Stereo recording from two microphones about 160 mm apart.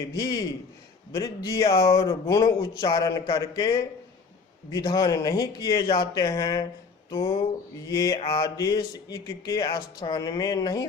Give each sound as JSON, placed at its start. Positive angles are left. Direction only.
{"t": 0.0, "sound": "speech", "side_deg": 25}
{"t": 7.1, "sound": "music", "side_deg": 35}
{"t": 7.9, "sound": "speech", "side_deg": 20}